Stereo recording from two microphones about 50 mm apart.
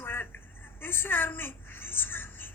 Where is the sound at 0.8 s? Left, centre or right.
Left.